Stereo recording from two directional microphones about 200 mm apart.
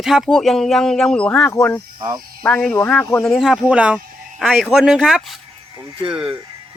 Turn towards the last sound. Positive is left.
turn(degrees=-5)  # may be behind; listen again after turning